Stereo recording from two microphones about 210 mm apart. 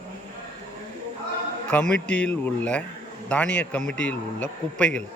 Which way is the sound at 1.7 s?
5° left (ahead or behind).